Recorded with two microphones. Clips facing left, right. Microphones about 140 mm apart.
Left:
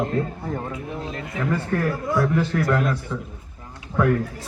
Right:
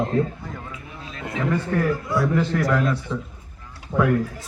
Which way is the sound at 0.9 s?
55° left (ahead or behind).